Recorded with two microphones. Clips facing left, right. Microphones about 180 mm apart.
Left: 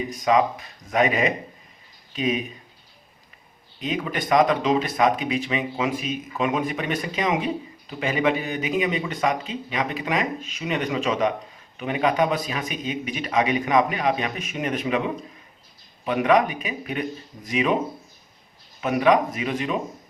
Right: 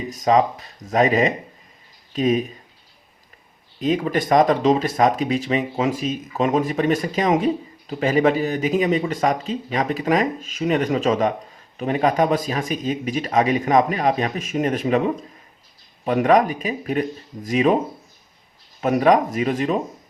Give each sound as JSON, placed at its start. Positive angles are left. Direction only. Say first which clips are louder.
{"t": 0.3, "sound": "speech", "louder": "right 3 dB", "side_deg": -40}
{"t": 3.8, "sound": "speech", "louder": "right 7 dB", "side_deg": -40}
{"t": 18.8, "sound": "speech", "louder": "right 3 dB", "side_deg": -40}